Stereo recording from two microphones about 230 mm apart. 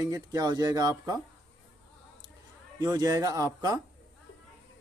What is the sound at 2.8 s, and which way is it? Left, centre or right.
Speech, centre.